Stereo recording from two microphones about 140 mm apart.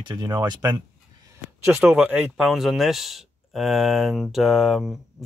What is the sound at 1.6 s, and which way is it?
Speech, 15° right (ahead or behind).